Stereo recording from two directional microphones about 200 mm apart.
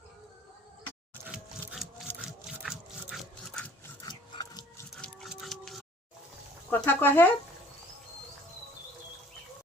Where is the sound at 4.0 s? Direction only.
20° left (ahead or behind).